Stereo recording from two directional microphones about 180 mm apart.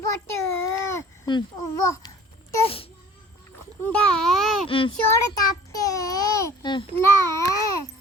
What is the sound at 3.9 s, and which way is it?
Speech, 5° left (ahead or behind).